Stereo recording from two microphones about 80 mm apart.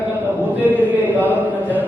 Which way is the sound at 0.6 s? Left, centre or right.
Right.